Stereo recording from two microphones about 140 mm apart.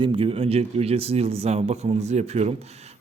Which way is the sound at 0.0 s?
40° right (ahead or behind).